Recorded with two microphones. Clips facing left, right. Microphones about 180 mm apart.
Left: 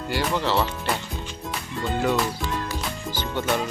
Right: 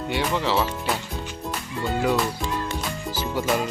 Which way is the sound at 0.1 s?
Centre (ahead or behind).